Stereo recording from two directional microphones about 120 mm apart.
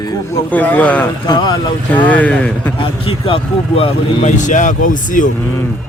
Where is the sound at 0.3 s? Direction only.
15° left (ahead or behind).